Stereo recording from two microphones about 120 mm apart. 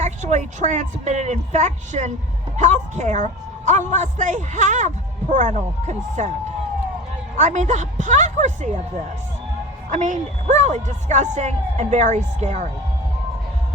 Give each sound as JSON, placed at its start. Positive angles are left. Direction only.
{"t": 0.0, "sound": "a woman's voice", "side_deg": -80}
{"t": 7.3, "sound": "a woman's voice", "side_deg": -80}
{"t": 9.9, "sound": "speech", "side_deg": -75}